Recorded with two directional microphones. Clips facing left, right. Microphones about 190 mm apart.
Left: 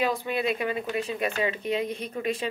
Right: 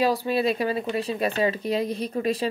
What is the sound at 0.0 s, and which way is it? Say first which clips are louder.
Speech: right 4 dB; 35° right (ahead or behind).